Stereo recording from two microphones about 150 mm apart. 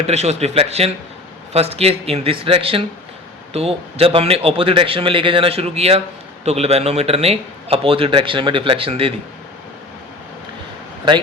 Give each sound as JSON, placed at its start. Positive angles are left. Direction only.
{"t": 0.0, "sound": "a man's voice", "side_deg": -45}